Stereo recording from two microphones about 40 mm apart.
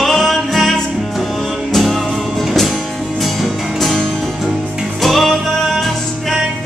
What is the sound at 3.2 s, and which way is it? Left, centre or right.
Music, centre.